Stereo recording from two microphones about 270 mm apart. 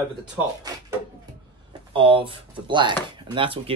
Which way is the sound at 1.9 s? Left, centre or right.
Centre.